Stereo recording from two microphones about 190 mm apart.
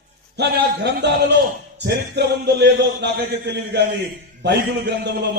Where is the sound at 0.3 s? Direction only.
60° right (ahead or behind).